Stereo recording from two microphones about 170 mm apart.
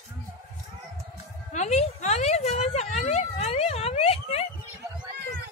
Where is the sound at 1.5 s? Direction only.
45° left (ahead or behind).